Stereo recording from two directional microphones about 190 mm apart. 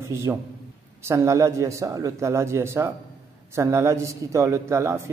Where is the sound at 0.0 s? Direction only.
15° right (ahead or behind).